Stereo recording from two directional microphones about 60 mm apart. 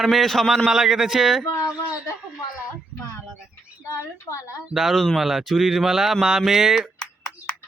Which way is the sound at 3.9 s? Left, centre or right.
Left.